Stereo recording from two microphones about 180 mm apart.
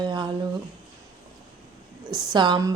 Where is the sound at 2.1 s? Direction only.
25° right (ahead or behind).